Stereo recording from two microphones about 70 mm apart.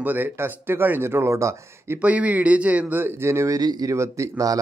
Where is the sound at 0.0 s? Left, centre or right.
Right.